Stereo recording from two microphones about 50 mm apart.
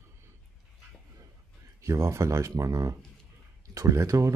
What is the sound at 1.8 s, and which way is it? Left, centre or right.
Speech, right.